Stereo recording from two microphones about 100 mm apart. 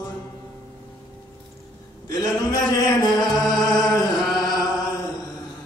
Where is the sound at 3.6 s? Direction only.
40° left (ahead or behind).